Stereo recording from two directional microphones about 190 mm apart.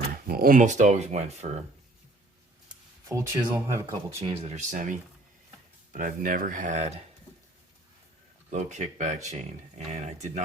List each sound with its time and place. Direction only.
0.3 s speech: 50° right (ahead or behind)
3.1 s speech: 15° right (ahead or behind)
4.4 s speech: 40° right (ahead or behind)
8.4 s speech: 40° right (ahead or behind)